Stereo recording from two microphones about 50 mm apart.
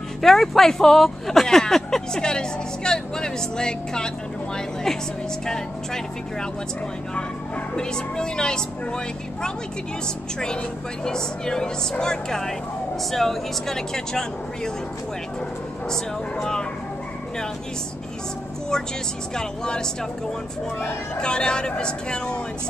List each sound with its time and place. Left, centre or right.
0.2 s speech: centre
7.7 s speech: centre
11.1 s speech: centre
15.9 s speech: centre
19.3 s speech: centre
21.2 s speech: centre